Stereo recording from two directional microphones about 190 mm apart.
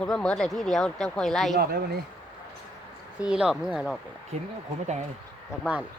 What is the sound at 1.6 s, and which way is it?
Speech, 55° right (ahead or behind).